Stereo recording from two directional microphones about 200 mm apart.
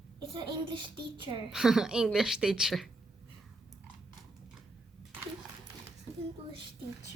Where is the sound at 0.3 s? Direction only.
25° right (ahead or behind).